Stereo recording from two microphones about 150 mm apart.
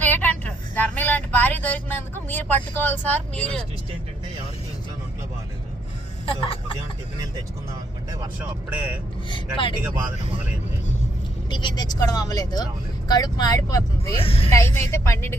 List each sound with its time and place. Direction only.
0.0 s vehicle: 10° left (ahead or behind)
6.2 s speech: 35° left (ahead or behind)
8.4 s speech: 10° right (ahead or behind)
11.5 s speech: 30° left (ahead or behind)
14.2 s speech: 40° left (ahead or behind)
14.5 s speech: 20° left (ahead or behind)